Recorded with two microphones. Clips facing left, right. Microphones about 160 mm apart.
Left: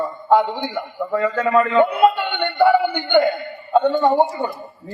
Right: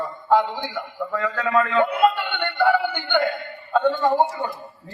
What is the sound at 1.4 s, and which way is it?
Speech, 45° left (ahead or behind).